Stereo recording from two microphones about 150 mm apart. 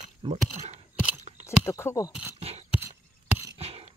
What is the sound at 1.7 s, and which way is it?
Speech, 20° left (ahead or behind).